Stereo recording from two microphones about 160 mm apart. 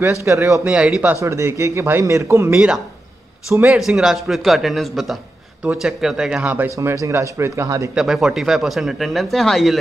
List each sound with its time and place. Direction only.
0.0 s speech: 15° right (ahead or behind)
0.7 s speech: 5° right (ahead or behind)
1.1 s speech: 20° right (ahead or behind)
2.5 s speech: 5° right (ahead or behind); by 7.9 s 20° right (ahead or behind)
7.9 s speech: 5° right (ahead or behind)